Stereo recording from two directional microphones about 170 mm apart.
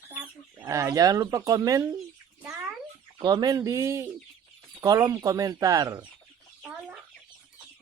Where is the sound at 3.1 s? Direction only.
25° right (ahead or behind).